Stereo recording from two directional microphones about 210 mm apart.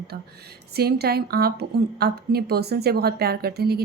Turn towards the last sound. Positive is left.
turn(degrees=-50)  # may be behind; listen again after turning